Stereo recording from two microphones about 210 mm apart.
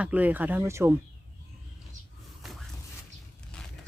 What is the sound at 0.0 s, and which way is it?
Speech, 5° right (ahead or behind).